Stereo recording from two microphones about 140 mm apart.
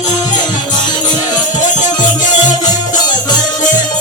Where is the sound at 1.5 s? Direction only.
60° left (ahead or behind).